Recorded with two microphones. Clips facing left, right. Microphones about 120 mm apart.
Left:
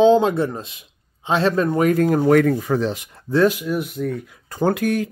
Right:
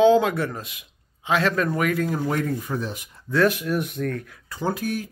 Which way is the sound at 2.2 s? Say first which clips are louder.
Left 10 dB; 85° left.